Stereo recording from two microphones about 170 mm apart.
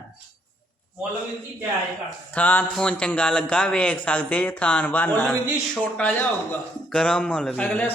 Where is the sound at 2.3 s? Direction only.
10° left (ahead or behind).